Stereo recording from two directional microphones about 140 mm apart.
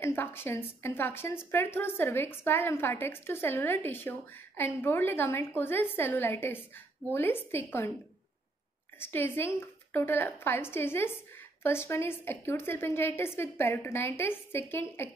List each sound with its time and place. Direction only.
0.0 s a woman's voice: 15° left (ahead or behind)
9.0 s a woman's voice: 15° left (ahead or behind)